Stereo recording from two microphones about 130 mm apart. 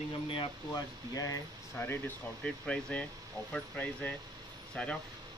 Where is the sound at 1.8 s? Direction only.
15° left (ahead or behind).